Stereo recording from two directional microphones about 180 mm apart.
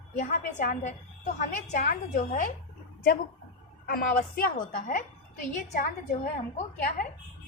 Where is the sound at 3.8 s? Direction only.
55° left (ahead or behind).